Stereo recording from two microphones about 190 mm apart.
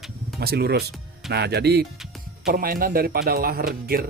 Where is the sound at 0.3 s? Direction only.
55° right (ahead or behind).